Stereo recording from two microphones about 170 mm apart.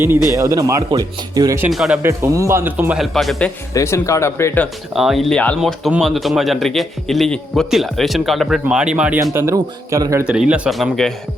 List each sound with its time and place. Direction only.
0.3 s speech: 20° right (ahead or behind)
1.7 s a man's voice: centre (ahead or behind)
2.0 s a man's voice: 15° right (ahead or behind); by 3.5 s centre (ahead or behind)
3.8 s speech: 15° left (ahead or behind)
4.9 s a man's voice: centre (ahead or behind); by 10.2 s 20° right (ahead or behind)
10.2 s a man's voice: 5° right (ahead or behind)